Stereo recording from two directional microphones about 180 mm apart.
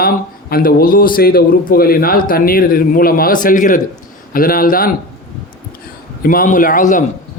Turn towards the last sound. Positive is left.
turn(degrees=45)  # may be behind; listen again after turning